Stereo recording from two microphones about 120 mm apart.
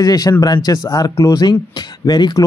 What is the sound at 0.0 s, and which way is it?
Speech, 30° left (ahead or behind).